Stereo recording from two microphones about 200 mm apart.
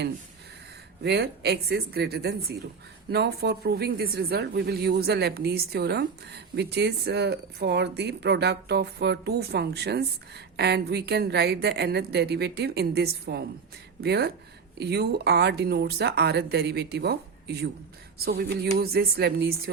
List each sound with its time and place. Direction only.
1.0 s speech: 55° right (ahead or behind)